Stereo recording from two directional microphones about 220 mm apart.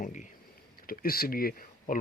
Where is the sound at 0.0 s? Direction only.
35° left (ahead or behind).